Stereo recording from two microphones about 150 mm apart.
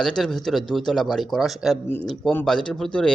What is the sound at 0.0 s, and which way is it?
A man's voice, 5° left (ahead or behind).